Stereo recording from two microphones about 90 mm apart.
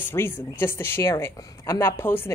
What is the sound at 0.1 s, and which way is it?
Speech, 25° left (ahead or behind).